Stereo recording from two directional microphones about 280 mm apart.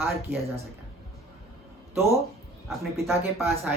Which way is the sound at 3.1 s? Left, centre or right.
Centre.